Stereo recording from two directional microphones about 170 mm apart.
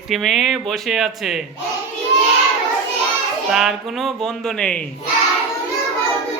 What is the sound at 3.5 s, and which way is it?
Speech, centre (ahead or behind).